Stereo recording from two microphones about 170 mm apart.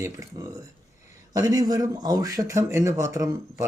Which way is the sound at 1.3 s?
20° right (ahead or behind).